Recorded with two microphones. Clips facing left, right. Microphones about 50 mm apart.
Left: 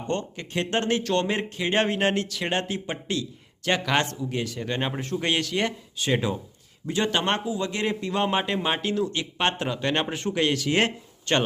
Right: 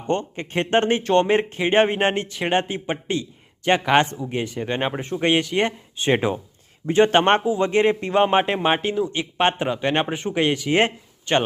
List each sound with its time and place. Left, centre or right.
0.1 s speech: right